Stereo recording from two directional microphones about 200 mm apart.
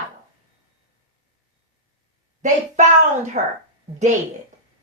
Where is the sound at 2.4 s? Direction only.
40° right (ahead or behind).